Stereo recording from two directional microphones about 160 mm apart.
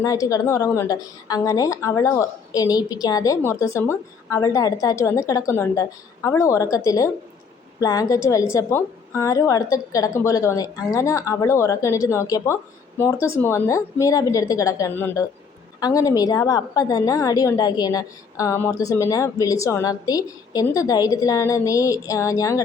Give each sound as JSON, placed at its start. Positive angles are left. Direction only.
{"t": 0.0, "sound": "a woman's voice", "side_deg": 20}